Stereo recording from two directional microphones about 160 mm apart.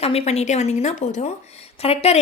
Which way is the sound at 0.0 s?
40° left (ahead or behind).